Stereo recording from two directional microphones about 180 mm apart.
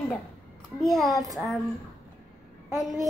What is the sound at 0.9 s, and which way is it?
Speech, centre (ahead or behind).